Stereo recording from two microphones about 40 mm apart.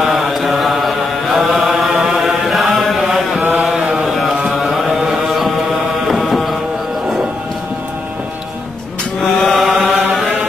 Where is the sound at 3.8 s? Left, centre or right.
Centre.